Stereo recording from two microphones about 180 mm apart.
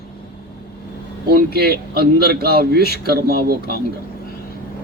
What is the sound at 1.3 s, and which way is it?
Speech, 60° right (ahead or behind).